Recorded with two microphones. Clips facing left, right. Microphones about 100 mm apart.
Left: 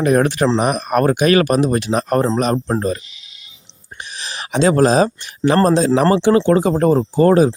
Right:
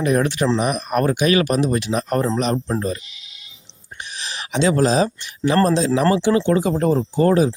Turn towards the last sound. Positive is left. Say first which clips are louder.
# left 4 dB
turn(degrees=45)  # may be behind; listen again after turning